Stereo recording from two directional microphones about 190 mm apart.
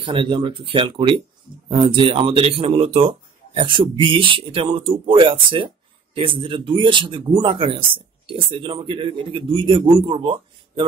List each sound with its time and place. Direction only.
0.0 s speech: 25° right (ahead or behind)